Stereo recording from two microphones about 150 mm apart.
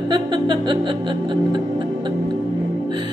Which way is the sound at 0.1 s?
30° right (ahead or behind).